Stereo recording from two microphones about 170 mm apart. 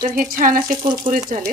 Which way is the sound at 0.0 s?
55° right (ahead or behind).